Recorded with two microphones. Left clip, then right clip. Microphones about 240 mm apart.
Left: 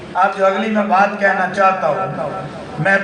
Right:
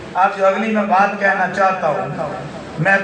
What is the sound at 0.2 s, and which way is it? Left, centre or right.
A man's voice, left.